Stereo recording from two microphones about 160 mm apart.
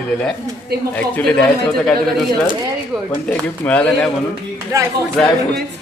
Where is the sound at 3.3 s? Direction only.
10° left (ahead or behind).